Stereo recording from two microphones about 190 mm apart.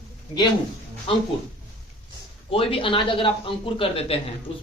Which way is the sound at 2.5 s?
30° left (ahead or behind).